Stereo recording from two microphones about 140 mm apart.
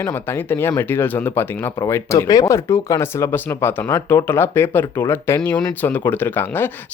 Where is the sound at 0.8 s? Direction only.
15° left (ahead or behind).